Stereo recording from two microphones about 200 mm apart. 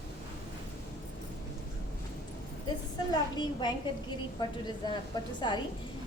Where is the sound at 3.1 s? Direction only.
20° left (ahead or behind).